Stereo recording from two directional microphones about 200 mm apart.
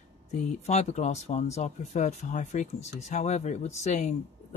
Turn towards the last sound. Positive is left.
turn(degrees=35)  # may be behind; listen again after turning